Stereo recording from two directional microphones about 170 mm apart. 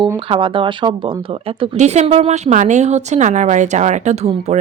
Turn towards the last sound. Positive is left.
turn(degrees=-40)  # may be behind; listen again after turning